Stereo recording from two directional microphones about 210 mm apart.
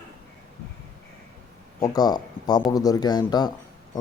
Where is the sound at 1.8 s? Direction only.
20° left (ahead or behind).